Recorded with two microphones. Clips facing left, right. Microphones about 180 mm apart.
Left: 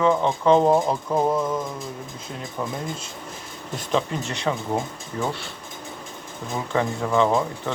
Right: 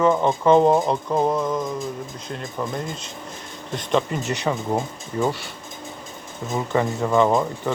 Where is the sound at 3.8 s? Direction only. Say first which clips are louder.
Right 2 dB; centre (ahead or behind).